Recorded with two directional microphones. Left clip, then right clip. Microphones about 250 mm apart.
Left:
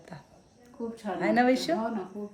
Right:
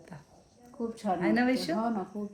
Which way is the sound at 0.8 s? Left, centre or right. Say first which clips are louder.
Right 1 dB; right.